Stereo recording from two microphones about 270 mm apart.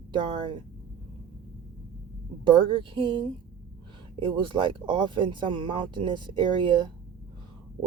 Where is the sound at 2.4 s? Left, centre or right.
Centre.